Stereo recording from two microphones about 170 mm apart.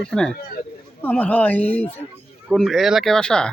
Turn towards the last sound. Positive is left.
turn(degrees=5)  # may be behind; listen again after turning